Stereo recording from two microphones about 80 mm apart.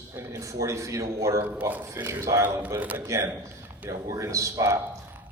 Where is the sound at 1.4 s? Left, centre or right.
Right.